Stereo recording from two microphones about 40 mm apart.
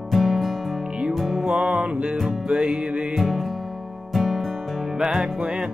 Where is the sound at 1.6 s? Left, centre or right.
Right.